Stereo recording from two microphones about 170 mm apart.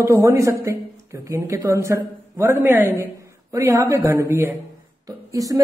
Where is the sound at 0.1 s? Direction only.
20° right (ahead or behind).